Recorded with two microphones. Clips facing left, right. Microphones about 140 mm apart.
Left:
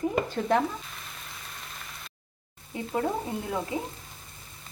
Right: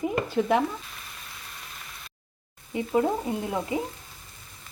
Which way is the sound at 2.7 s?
15° right (ahead or behind).